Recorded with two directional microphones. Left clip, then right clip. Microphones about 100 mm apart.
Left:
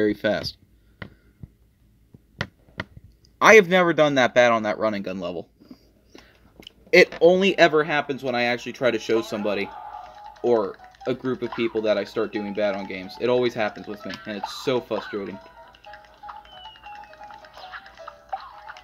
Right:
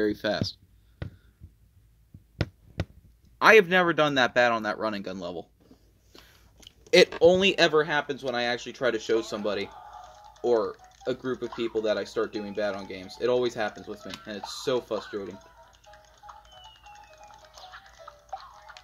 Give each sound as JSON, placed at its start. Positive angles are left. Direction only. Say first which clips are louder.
{"t": 0.0, "sound": "speech", "louder": "left 5 dB", "side_deg": 15}
{"t": 3.4, "sound": "speech", "louder": "left 4 dB", "side_deg": 5}
{"t": 6.9, "sound": "speech", "louder": "left 3 dB", "side_deg": -30}
{"t": 7.4, "sound": "speech", "louder": "left 4 dB", "side_deg": -5}
{"t": 7.8, "sound": "speech", "louder": "left 3 dB", "side_deg": 10}
{"t": 9.4, "sound": "speech", "louder": "left 4 dB", "side_deg": 0}
{"t": 9.7, "sound": "music", "louder": "left 7 dB", "side_deg": -15}
{"t": 10.4, "sound": "speech", "louder": "left 3 dB", "side_deg": -5}
{"t": 11.5, "sound": "speech", "louder": "left 5 dB", "side_deg": 5}
{"t": 15.3, "sound": "music", "louder": "left 7 dB", "side_deg": -15}